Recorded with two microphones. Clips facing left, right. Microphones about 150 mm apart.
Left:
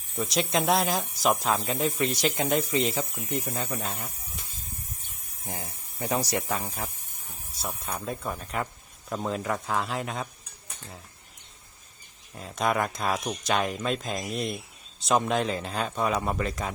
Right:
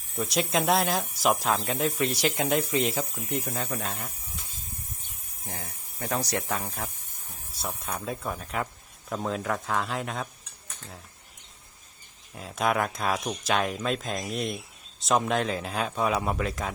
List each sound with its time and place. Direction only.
0.2 s speech: centre (ahead or behind)
5.5 s speech: 15° left (ahead or behind)
6.0 s speech: 5° left (ahead or behind)
12.3 s speech: centre (ahead or behind)